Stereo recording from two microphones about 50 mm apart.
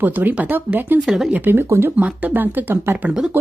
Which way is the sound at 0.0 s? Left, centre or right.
Right.